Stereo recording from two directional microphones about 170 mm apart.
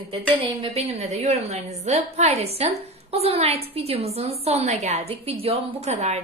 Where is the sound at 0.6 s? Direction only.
40° right (ahead or behind).